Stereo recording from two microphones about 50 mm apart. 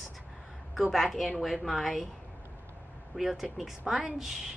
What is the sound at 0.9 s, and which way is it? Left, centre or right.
A woman's voice, centre.